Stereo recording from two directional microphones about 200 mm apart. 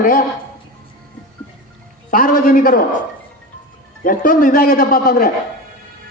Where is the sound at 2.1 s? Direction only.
45° left (ahead or behind).